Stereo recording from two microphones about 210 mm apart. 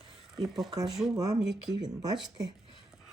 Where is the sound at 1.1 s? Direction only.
15° right (ahead or behind).